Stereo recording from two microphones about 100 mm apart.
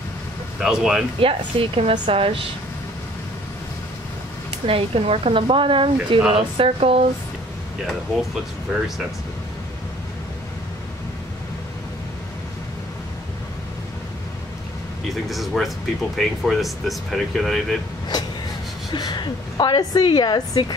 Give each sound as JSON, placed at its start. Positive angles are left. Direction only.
{"t": 0.6, "sound": "speech", "side_deg": -5}
{"t": 1.2, "sound": "a woman's voice", "side_deg": -70}
{"t": 4.6, "sound": "a woman's voice", "side_deg": -75}
{"t": 5.9, "sound": "speech", "side_deg": -5}
{"t": 6.6, "sound": "speech", "side_deg": -85}
{"t": 8.7, "sound": "speech", "side_deg": -15}
{"t": 15.2, "sound": "speech", "side_deg": 0}
{"t": 18.9, "sound": "a woman's voice", "side_deg": 45}